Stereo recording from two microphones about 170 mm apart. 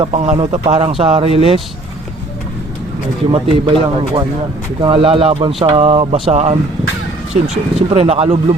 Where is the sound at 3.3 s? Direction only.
30° right (ahead or behind).